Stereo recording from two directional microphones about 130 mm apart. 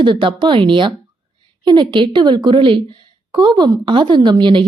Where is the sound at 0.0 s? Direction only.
40° right (ahead or behind).